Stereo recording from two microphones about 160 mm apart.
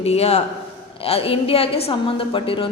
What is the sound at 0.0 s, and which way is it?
A woman's voice, 40° left (ahead or behind).